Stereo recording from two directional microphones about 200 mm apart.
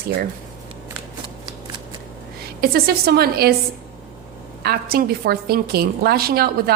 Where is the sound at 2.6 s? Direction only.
50° right (ahead or behind).